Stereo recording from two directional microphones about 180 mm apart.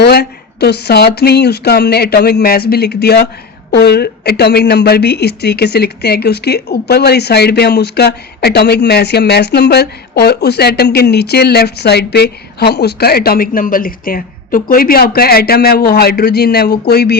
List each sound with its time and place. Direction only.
0.0 s speech: 65° left (ahead or behind)